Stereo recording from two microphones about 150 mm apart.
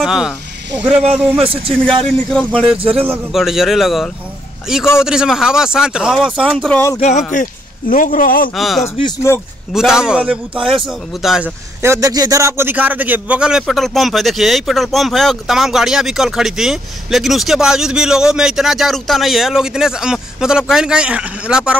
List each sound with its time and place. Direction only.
0.0 s a man's voice: 5° right (ahead or behind)
1.4 s a man's voice: 40° right (ahead or behind)
2.2 s a man's voice: centre (ahead or behind)
7.0 s speech: 50° left (ahead or behind)
7.9 s a man's voice: 65° left (ahead or behind)
8.5 s a man's voice: centre (ahead or behind)
9.3 s a man's voice: 15° left (ahead or behind)
9.7 s a man's voice: 5° right (ahead or behind)
11.8 s a man's voice: 20° right (ahead or behind)